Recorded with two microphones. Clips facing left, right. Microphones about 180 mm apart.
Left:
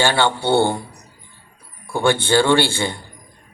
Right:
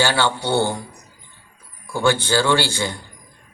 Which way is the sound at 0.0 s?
55° left (ahead or behind).